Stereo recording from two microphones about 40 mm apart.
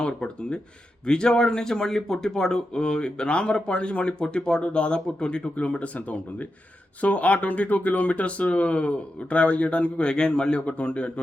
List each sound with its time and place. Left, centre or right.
0.0 s speech: left